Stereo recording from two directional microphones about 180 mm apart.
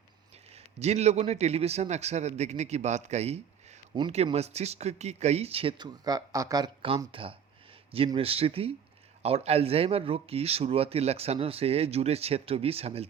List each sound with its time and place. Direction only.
0.5 s speech: 40° right (ahead or behind)